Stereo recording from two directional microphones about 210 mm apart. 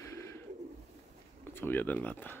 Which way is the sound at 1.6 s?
10° left (ahead or behind).